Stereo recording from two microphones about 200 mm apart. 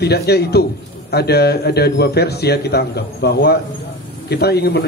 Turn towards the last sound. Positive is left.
turn(degrees=55)  # may be behind; listen again after turning